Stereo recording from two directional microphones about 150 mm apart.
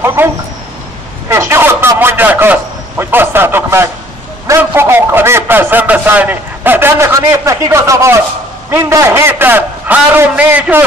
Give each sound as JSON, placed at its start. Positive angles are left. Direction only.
{"t": 0.0, "sound": "speech", "side_deg": -15}
{"t": 1.3, "sound": "a man's voice", "side_deg": -15}